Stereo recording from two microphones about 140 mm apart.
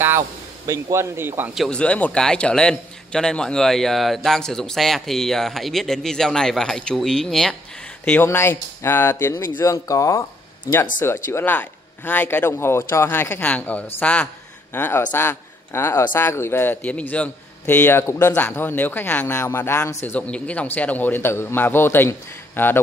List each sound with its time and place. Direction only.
0.7 s speech: 20° right (ahead or behind)
1.5 s a man's voice: 5° left (ahead or behind)
8.0 s a man's voice: 15° left (ahead or behind)
9.3 s speech: 35° left (ahead or behind)
9.6 s a man's voice: 20° left (ahead or behind)